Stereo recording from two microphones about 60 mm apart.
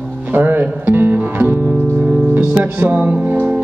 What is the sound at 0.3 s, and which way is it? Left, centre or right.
Music, right.